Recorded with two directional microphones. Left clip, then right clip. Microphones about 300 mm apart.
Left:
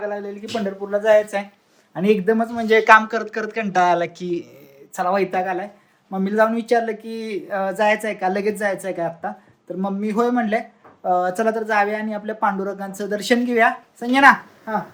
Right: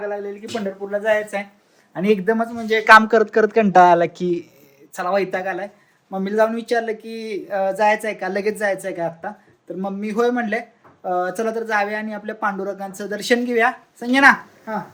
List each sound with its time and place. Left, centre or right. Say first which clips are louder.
0.0 s speech: even; centre
2.6 s speech: left 4 dB; left
2.8 s speech: right 6 dB; centre